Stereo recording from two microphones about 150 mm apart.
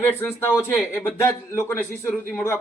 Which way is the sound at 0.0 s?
15° left (ahead or behind).